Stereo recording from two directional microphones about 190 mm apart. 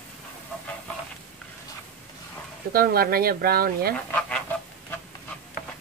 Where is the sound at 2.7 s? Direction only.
50° right (ahead or behind).